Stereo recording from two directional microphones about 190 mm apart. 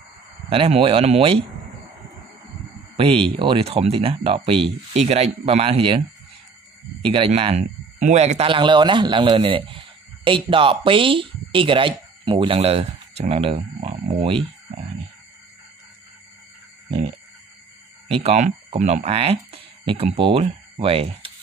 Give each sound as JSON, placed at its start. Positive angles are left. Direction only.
{"t": 0.5, "sound": "speech", "side_deg": -30}
{"t": 3.0, "sound": "speech", "side_deg": -30}
{"t": 18.0, "sound": "speech", "side_deg": -30}